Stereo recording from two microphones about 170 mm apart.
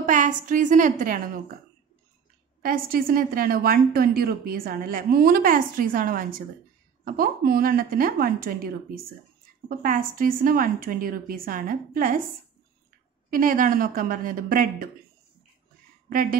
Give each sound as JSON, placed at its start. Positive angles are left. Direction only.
{"t": 0.0, "sound": "a woman's voice", "side_deg": -50}
{"t": 2.6, "sound": "a woman's voice", "side_deg": -60}
{"t": 9.7, "sound": "a woman's voice", "side_deg": -50}
{"t": 13.3, "sound": "a woman's voice", "side_deg": -55}
{"t": 16.1, "sound": "speech", "side_deg": -55}